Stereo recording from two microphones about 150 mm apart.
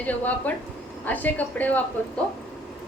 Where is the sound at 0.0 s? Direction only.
10° left (ahead or behind).